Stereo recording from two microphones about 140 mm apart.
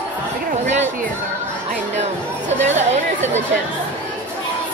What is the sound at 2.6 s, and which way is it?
Chatter, 55° right (ahead or behind).